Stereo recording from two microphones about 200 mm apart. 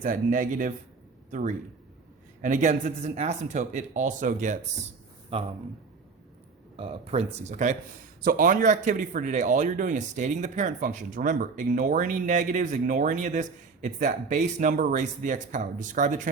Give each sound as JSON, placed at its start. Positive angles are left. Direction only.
{"t": 0.0, "sound": "speech", "side_deg": -40}
{"t": 6.7, "sound": "speech", "side_deg": -30}